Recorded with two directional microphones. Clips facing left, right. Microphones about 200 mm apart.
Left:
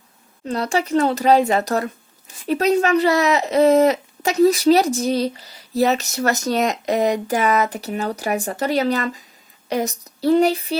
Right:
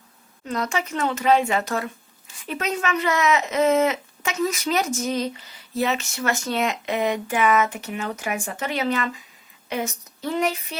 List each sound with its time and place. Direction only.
0.4 s speech: 35° left (ahead or behind)